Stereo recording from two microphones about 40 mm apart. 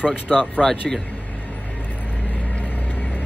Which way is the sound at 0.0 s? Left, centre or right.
Centre.